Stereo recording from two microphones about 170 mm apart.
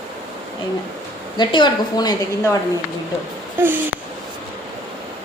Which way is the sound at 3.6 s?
10° right (ahead or behind).